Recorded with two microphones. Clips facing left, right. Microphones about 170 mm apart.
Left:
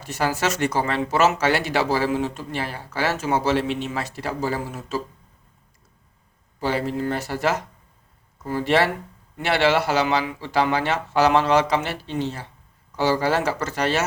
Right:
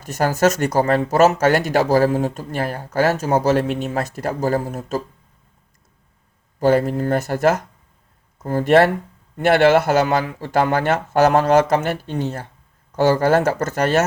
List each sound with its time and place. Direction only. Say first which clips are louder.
0.0 s speech: right 6 dB; 45° right (ahead or behind)
6.6 s speech: right 7 dB; 50° right (ahead or behind)